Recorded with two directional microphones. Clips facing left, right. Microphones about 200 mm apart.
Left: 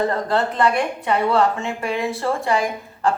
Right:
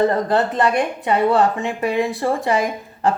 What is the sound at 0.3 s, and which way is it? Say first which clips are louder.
Speech: right 2 dB; 20° right (ahead or behind).